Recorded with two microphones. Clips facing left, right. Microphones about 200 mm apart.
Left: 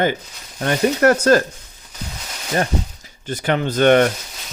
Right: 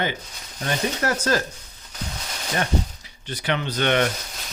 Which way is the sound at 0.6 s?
60° left (ahead or behind).